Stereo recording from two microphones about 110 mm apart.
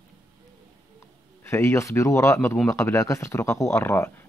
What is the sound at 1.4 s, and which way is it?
Speech, 25° left (ahead or behind).